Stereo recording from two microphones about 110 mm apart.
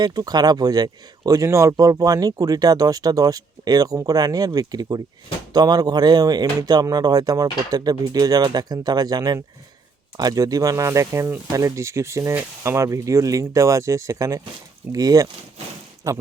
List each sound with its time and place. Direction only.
0.0 s speech: 35° right (ahead or behind)